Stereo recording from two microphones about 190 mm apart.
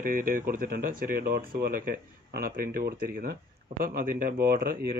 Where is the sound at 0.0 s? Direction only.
50° right (ahead or behind).